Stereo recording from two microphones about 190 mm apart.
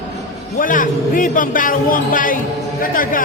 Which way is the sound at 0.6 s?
45° left (ahead or behind).